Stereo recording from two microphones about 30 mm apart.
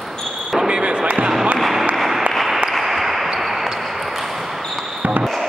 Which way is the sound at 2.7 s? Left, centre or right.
Centre.